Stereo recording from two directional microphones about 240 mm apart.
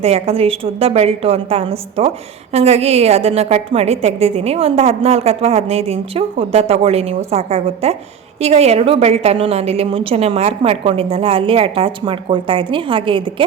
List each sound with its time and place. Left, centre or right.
0.0 s a woman's voice: right